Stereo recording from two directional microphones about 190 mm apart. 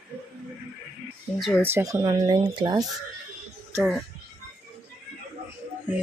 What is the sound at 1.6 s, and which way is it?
Speech, 15° right (ahead or behind).